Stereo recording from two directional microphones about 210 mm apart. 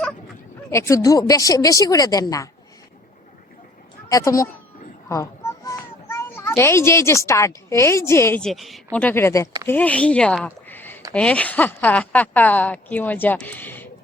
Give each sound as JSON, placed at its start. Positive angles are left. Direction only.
{"t": 0.7, "sound": "a woman's voice", "side_deg": 15}
{"t": 4.1, "sound": "a woman's voice", "side_deg": 15}
{"t": 5.0, "sound": "a sound", "side_deg": 15}
{"t": 6.6, "sound": "a woman's voice", "side_deg": 10}